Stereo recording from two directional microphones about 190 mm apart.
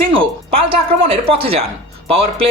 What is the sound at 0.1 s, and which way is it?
Speech, 30° right (ahead or behind).